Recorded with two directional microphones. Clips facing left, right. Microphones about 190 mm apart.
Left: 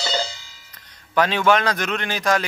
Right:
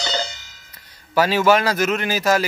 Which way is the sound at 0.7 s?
5° right (ahead or behind).